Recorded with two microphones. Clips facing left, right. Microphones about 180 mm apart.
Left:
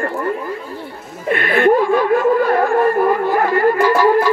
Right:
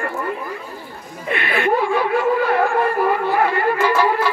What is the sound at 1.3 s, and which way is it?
Speech, 50° left (ahead or behind).